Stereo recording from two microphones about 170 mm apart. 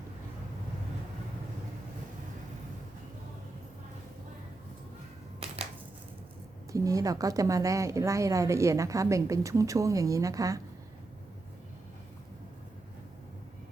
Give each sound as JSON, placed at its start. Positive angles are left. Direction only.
{"t": 6.7, "sound": "a woman's voice", "side_deg": -20}